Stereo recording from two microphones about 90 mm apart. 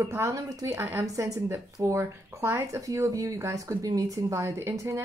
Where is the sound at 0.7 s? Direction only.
25° right (ahead or behind).